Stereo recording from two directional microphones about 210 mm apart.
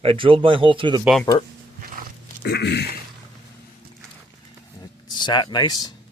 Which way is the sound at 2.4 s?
50° left (ahead or behind).